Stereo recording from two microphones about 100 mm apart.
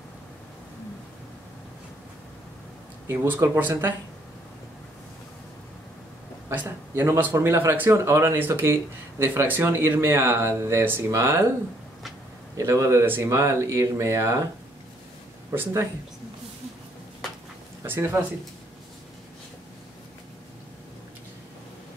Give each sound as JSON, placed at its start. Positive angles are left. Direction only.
{"t": 3.1, "sound": "speech", "side_deg": -25}
{"t": 6.5, "sound": "speech", "side_deg": -20}
{"t": 12.5, "sound": "speech", "side_deg": -30}
{"t": 15.5, "sound": "speech", "side_deg": -25}
{"t": 17.8, "sound": "speech", "side_deg": -25}